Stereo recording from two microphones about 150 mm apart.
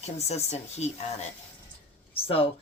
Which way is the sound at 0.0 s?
45° left (ahead or behind).